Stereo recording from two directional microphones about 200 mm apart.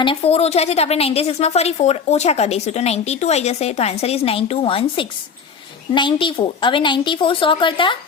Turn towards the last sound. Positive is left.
turn(degrees=25)  # may be behind; listen again after turning